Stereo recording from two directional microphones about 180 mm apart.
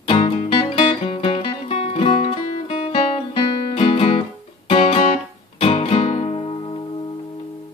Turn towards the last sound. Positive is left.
turn(degrees=25)  # may be behind; listen again after turning